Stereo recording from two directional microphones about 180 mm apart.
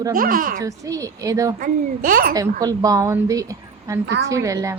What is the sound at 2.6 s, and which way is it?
A woman's voice, 20° right (ahead or behind).